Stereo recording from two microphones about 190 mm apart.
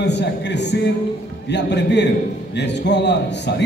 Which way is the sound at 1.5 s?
65° left (ahead or behind).